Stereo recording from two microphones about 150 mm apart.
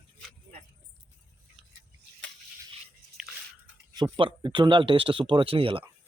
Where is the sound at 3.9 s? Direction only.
30° right (ahead or behind).